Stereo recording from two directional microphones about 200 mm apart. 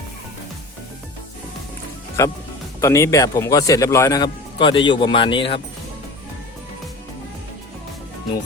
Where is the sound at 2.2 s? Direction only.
15° left (ahead or behind).